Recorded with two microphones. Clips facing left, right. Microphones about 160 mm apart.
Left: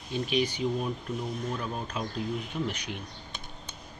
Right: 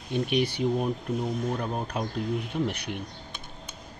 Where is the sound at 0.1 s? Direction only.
65° right (ahead or behind).